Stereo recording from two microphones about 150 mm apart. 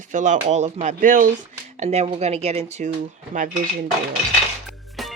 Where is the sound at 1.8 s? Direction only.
45° right (ahead or behind).